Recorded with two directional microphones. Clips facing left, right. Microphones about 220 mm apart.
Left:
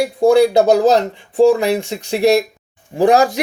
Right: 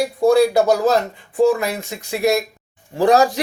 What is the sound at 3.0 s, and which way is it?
Speech, 10° left (ahead or behind).